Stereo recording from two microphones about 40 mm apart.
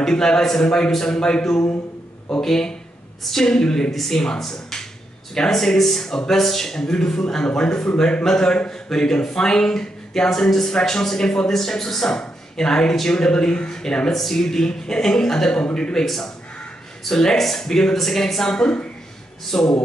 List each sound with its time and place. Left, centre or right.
0.0 s a man's voice: centre
2.4 s speech: centre
3.9 s speech: centre
14.1 s a man's voice: centre
18.6 s speech: left
19.5 s speech: centre